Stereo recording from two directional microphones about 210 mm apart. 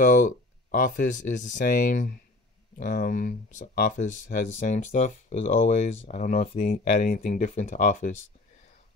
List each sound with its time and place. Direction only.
0.0 s speech: 40° left (ahead or behind)